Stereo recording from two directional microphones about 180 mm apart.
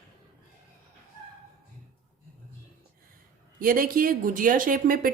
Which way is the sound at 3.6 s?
50° right (ahead or behind).